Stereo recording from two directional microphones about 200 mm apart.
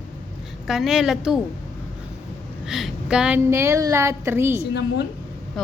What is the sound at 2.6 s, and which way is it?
Speech, centre (ahead or behind).